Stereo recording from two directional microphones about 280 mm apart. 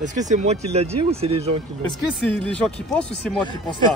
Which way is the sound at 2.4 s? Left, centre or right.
Centre.